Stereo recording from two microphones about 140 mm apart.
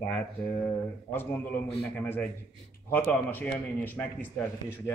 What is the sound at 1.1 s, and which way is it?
A man's voice, 10° left (ahead or behind).